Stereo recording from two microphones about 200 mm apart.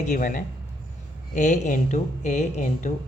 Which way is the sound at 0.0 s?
40° left (ahead or behind).